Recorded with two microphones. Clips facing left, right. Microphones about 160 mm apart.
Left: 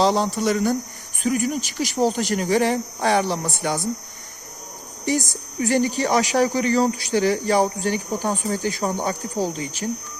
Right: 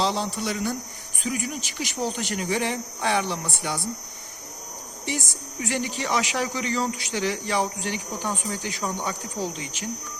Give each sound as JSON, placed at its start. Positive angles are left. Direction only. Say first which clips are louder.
{"t": 0.0, "sound": "speech", "louder": "left 7 dB", "side_deg": 45}
{"t": 5.0, "sound": "speech", "louder": "left 8 dB", "side_deg": 40}